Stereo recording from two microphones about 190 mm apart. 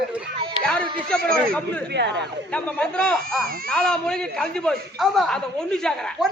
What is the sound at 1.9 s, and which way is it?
Speech, 65° right (ahead or behind).